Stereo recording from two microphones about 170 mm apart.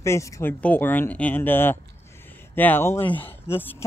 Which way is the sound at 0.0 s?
15° left (ahead or behind).